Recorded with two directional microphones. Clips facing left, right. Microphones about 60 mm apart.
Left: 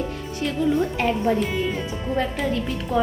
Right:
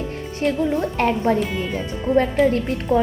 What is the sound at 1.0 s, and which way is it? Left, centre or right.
Speech, right.